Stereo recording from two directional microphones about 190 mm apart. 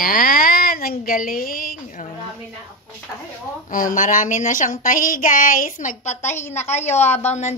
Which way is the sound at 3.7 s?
45° left (ahead or behind).